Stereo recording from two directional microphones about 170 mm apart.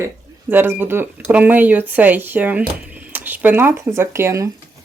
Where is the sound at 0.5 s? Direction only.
10° right (ahead or behind).